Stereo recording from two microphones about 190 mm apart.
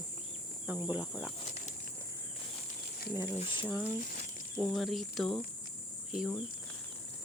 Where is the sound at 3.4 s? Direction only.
25° left (ahead or behind).